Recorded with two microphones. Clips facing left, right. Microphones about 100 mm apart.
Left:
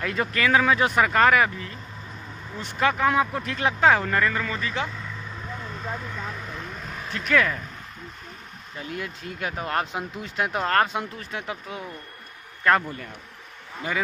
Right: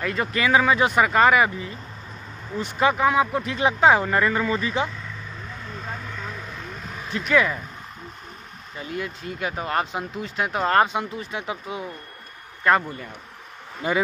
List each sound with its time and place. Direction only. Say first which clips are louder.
0.0 s speech: right 1 dB; centre (ahead or behind)
2.8 s speech: right 2 dB; 10° right (ahead or behind)
7.1 s speech: right 2 dB; 10° right (ahead or behind)
8.7 s speech: right 3 dB; centre (ahead or behind)
13.8 s a man's voice: right 5 dB; 20° right (ahead or behind)